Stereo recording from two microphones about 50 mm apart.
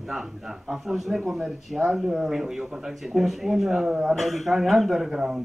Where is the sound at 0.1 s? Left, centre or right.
Centre.